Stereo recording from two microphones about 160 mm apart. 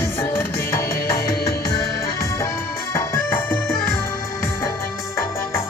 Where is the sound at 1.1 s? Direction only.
20° left (ahead or behind).